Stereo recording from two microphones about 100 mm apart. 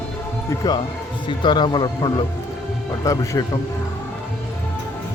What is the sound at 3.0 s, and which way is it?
Speech, 35° left (ahead or behind).